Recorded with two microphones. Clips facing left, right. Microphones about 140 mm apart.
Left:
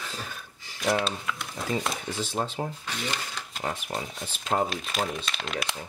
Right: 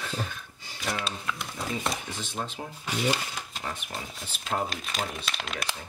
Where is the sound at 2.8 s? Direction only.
10° right (ahead or behind).